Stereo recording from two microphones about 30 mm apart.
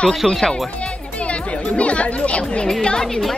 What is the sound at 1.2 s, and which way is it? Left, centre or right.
Speech, left.